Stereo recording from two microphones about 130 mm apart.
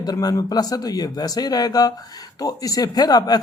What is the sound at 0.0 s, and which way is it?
A man's voice, 30° left (ahead or behind).